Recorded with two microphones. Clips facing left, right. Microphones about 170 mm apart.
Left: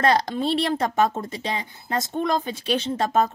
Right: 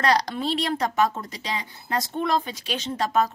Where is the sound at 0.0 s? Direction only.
25° left (ahead or behind).